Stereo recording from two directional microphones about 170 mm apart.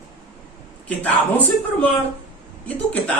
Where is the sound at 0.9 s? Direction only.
10° left (ahead or behind).